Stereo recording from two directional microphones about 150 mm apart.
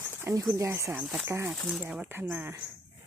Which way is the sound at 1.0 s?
5° right (ahead or behind).